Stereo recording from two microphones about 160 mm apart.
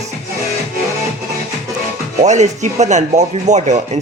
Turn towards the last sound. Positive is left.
turn(degrees=-50)  # may be behind; listen again after turning